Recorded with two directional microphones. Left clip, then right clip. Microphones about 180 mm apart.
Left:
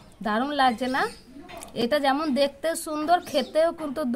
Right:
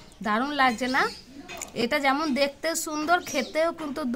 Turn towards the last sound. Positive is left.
turn(degrees=15)  # may be behind; listen again after turning